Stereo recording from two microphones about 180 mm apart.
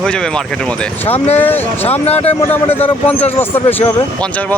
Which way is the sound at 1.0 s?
35° left (ahead or behind).